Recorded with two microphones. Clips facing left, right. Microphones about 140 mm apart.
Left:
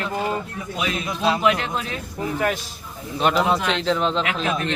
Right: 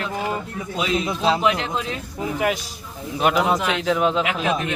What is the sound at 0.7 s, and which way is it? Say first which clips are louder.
A man's voice: right 4 dB; 25° right (ahead or behind).